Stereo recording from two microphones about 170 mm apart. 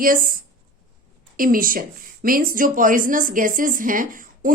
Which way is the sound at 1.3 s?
55° right (ahead or behind).